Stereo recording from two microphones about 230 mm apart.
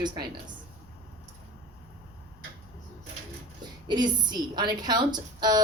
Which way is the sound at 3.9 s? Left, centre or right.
Centre.